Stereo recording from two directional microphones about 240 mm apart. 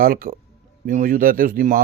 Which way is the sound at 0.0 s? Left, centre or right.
Right.